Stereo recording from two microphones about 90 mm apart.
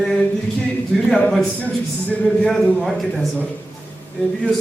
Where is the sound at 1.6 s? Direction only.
15° left (ahead or behind).